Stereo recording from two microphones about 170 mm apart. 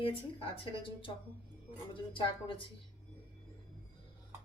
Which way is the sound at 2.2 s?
30° left (ahead or behind).